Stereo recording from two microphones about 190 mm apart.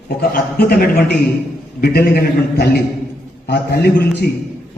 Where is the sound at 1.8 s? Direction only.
55° left (ahead or behind).